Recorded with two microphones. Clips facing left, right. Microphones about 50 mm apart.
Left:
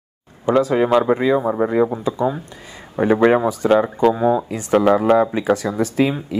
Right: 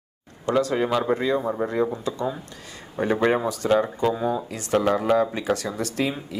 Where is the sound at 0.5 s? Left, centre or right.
Centre.